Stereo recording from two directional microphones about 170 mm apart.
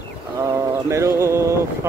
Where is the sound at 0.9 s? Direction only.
15° right (ahead or behind).